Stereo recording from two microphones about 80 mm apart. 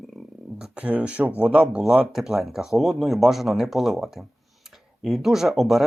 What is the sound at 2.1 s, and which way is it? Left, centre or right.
Speech, centre.